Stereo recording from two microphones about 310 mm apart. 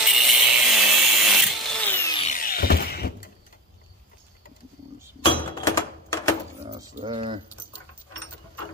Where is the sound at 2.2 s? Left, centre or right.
Left.